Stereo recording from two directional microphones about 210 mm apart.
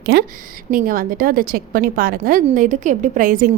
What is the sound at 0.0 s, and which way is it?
A woman's voice, 50° right (ahead or behind).